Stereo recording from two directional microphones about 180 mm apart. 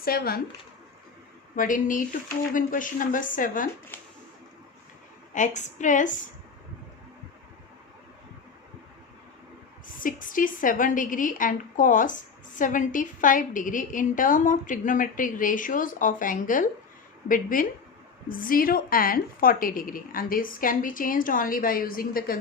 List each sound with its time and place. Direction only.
0.0 s speech: 55° left (ahead or behind)
1.5 s a woman's voice: 50° left (ahead or behind)
5.3 s a woman's voice: 45° left (ahead or behind)
9.8 s a woman's voice: 50° left (ahead or behind)